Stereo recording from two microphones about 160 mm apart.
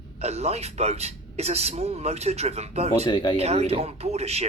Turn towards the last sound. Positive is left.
turn(degrees=-40)  # may be behind; listen again after turning